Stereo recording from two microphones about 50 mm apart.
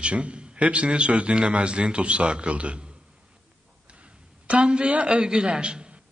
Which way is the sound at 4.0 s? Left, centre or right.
Right.